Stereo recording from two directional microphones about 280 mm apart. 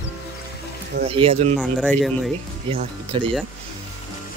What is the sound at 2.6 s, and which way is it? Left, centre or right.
Speech, centre.